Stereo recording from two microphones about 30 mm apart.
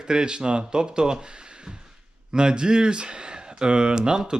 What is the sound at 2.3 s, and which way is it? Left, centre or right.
Speech, right.